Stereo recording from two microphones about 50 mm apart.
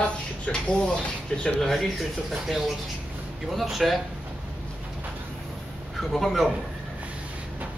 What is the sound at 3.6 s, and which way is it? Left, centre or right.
Speech, centre.